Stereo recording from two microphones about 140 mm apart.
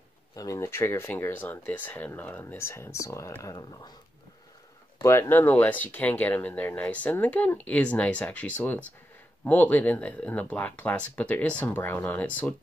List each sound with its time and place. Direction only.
0.4 s speech: 20° left (ahead or behind)
5.0 s speech: 20° left (ahead or behind)